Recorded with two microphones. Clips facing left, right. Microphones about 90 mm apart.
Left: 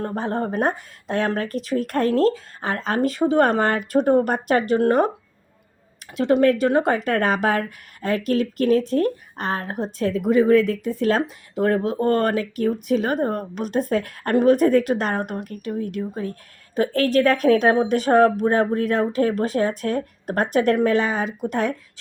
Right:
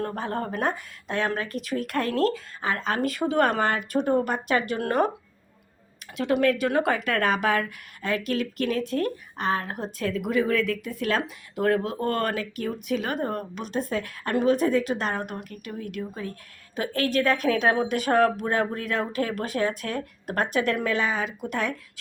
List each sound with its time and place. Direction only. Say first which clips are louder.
0.0 s speech: left 4 dB; 30° left (ahead or behind)
6.1 s speech: left 5 dB; 35° left (ahead or behind)